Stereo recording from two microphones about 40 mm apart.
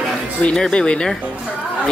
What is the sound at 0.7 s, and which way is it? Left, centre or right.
Speech, left.